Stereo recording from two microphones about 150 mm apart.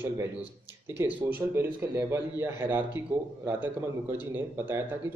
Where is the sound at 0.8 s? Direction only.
15° right (ahead or behind).